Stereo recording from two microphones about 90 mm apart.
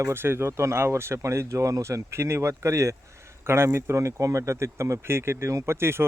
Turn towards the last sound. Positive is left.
turn(degrees=-30)  # may be behind; listen again after turning